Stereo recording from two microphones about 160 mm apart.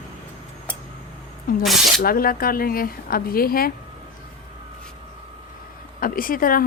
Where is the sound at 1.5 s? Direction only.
60° left (ahead or behind).